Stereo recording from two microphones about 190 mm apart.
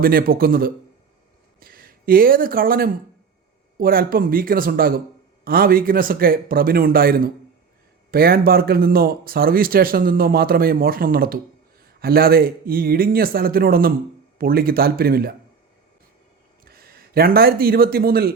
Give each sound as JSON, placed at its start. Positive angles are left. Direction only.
{"t": 0.0, "sound": "a man's voice", "side_deg": -50}
{"t": 16.6, "sound": "a man's voice", "side_deg": -55}